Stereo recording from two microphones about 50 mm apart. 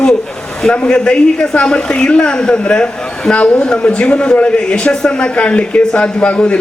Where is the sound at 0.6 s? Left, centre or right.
Centre.